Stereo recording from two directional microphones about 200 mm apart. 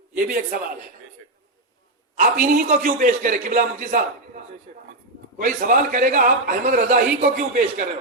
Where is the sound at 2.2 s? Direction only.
40° right (ahead or behind).